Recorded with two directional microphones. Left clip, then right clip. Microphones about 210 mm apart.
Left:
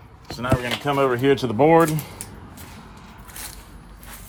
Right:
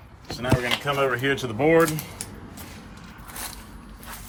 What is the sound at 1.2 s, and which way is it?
Speech, 35° left (ahead or behind).